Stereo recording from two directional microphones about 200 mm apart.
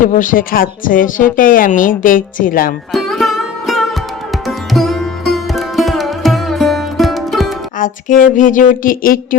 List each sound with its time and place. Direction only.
0.0 s a woman's voice: 40° left (ahead or behind)
2.9 s music: centre (ahead or behind)
7.8 s a woman's voice: 45° left (ahead or behind)